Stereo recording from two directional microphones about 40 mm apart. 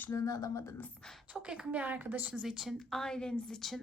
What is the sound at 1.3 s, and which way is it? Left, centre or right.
Speech, right.